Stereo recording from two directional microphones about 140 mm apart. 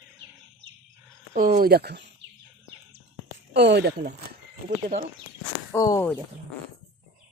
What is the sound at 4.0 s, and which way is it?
Speech, 90° right.